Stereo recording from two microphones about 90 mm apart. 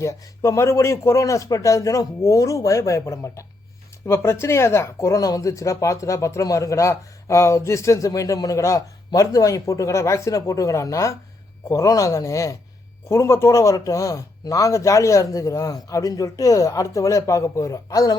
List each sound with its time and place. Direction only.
0.0 s speech: 35° left (ahead or behind)